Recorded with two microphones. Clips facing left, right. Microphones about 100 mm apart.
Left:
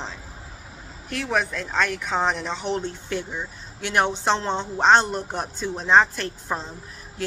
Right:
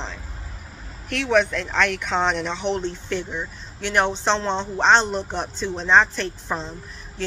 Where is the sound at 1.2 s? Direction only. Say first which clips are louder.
Right 5 dB; 5° left (ahead or behind).